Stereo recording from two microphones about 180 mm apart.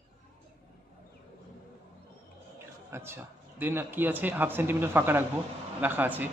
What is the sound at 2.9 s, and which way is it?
Speech, 15° right (ahead or behind).